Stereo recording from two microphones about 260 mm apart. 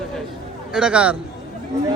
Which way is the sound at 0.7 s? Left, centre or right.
Centre.